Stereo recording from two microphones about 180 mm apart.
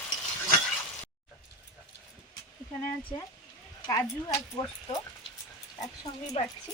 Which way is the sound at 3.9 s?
20° left (ahead or behind).